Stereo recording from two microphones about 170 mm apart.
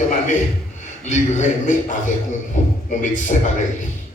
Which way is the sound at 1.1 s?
45° left (ahead or behind).